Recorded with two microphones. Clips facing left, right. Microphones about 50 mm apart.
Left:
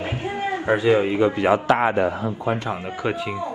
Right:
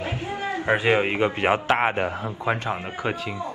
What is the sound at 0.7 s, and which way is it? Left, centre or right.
A man's voice, right.